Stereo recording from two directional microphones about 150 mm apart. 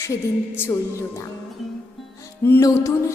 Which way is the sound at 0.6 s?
20° left (ahead or behind).